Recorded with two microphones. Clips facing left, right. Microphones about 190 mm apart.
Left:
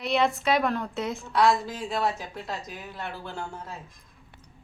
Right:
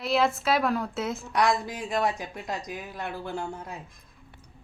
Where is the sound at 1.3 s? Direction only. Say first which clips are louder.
Left 3 dB; 15° right (ahead or behind).